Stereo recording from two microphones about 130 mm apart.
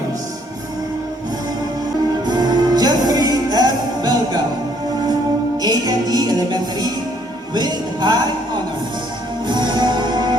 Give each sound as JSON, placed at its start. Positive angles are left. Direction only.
{"t": 2.2, "sound": "music", "side_deg": -35}
{"t": 5.6, "sound": "music", "side_deg": -30}
{"t": 9.5, "sound": "music", "side_deg": -35}